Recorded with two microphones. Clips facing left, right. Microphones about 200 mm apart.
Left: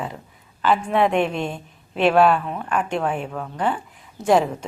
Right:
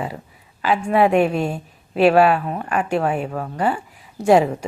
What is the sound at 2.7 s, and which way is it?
A woman's voice, 5° right (ahead or behind).